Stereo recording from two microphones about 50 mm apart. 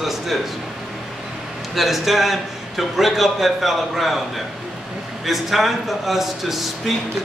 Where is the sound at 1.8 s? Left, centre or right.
Centre.